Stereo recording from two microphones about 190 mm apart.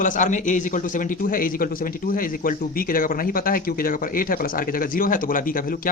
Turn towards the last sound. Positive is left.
turn(degrees=45)  # may be behind; listen again after turning